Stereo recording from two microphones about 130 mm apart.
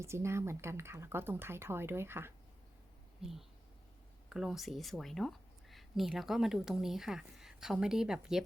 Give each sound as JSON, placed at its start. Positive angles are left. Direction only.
{"t": 0.0, "sound": "speech", "side_deg": -20}
{"t": 3.2, "sound": "speech", "side_deg": -5}